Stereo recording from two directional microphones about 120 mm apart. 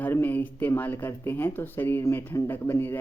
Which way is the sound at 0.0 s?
15° left (ahead or behind).